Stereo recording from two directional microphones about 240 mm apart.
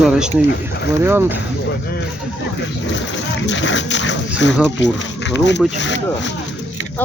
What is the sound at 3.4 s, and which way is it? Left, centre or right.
Dog, left.